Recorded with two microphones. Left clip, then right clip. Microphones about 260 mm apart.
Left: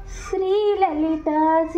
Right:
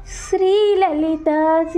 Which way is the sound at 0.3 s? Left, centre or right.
Right.